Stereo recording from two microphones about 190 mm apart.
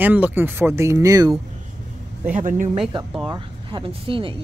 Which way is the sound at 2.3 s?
45° right (ahead or behind).